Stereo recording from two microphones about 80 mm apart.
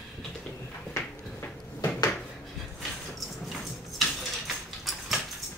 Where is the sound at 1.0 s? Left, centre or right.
Left.